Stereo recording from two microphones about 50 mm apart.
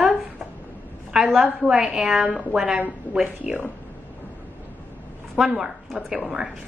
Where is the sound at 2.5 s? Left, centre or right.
Centre.